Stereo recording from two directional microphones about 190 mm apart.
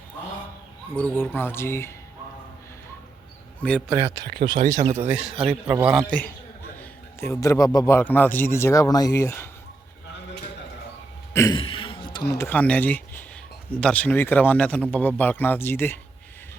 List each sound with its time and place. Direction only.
0.9 s speech: 10° left (ahead or behind)
3.6 s speech: 5° left (ahead or behind)
3.8 s a man's voice: 15° right (ahead or behind)
4.2 s speech: 55° right (ahead or behind)
4.8 s speech: 35° right (ahead or behind)
5.0 s a man's voice: 5° right (ahead or behind)
6.1 s a man's voice: 5° left (ahead or behind)
11.3 s a sound: 20° left (ahead or behind)
12.3 s speech: 10° left (ahead or behind)